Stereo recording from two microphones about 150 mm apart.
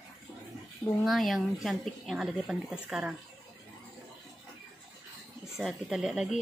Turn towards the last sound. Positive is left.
turn(degrees=-5)  # may be behind; listen again after turning